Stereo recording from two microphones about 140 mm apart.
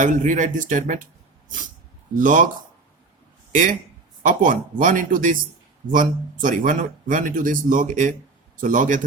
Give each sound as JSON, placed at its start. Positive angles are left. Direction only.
{"t": 0.0, "sound": "speech", "side_deg": -65}
{"t": 2.1, "sound": "speech", "side_deg": -70}
{"t": 3.5, "sound": "speech", "side_deg": -70}